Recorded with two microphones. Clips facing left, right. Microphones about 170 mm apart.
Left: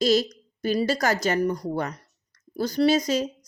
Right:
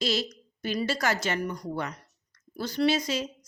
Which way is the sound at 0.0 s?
40° left (ahead or behind).